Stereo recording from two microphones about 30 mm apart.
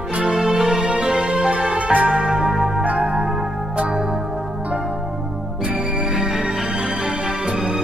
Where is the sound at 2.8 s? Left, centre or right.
Right.